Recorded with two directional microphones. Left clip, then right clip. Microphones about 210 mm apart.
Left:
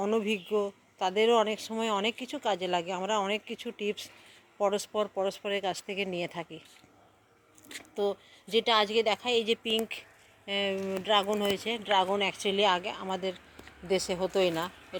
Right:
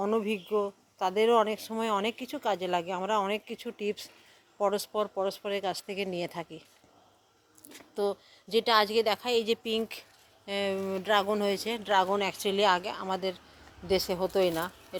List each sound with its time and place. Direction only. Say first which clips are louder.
0.0 s a woman's voice: even; centre (ahead or behind)
7.9 s a woman's voice: even; 5° right (ahead or behind)